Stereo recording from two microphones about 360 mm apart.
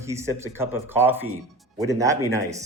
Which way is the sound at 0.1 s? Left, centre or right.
Centre.